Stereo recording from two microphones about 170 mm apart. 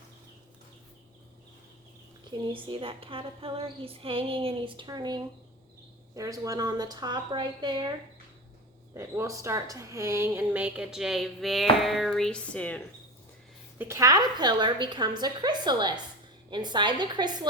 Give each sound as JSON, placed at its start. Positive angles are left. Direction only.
{"t": 2.5, "sound": "female singing", "side_deg": -30}
{"t": 6.1, "sound": "a woman's voice", "side_deg": -20}
{"t": 9.0, "sound": "a woman's voice", "side_deg": -20}
{"t": 13.7, "sound": "a woman's voice", "side_deg": -15}